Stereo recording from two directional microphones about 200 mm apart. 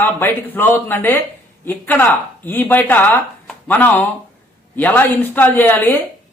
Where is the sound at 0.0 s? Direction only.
10° left (ahead or behind).